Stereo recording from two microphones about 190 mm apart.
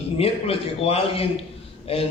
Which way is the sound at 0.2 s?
30° left (ahead or behind).